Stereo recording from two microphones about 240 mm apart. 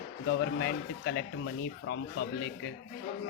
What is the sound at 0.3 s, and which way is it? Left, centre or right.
Speech, left.